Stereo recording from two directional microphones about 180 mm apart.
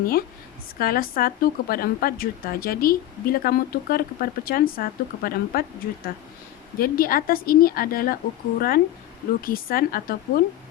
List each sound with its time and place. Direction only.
0.8 s a woman's voice: 55° left (ahead or behind)
6.7 s a woman's voice: 55° left (ahead or behind)